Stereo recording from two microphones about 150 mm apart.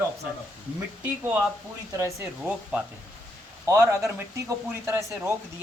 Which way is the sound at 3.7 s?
20° right (ahead or behind).